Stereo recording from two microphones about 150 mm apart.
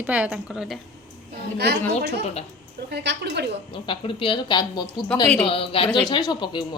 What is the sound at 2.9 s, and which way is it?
Speech, 90° right.